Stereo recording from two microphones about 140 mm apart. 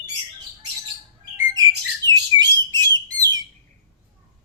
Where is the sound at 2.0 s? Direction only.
30° right (ahead or behind).